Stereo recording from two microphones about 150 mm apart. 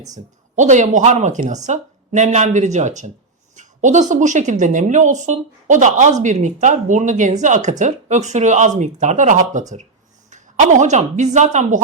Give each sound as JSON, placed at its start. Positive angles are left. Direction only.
{"t": 0.5, "sound": "a woman's voice", "side_deg": -55}